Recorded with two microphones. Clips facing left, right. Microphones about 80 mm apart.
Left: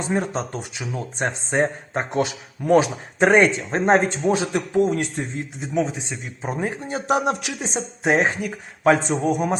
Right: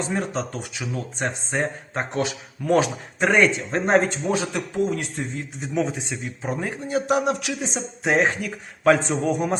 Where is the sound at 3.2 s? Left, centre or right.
Left.